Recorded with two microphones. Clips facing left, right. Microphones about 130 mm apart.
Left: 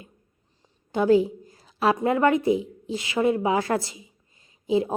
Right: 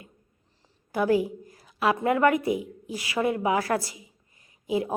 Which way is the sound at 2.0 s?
25° left (ahead or behind).